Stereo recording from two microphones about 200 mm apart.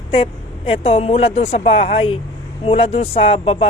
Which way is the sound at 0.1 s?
30° left (ahead or behind).